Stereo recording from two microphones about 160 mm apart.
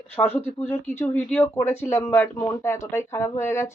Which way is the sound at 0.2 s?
10° left (ahead or behind).